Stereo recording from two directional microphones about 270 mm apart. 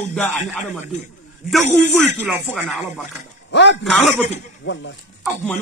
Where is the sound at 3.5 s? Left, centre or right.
Left.